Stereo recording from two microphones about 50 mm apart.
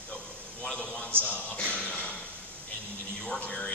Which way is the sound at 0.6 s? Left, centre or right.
Centre.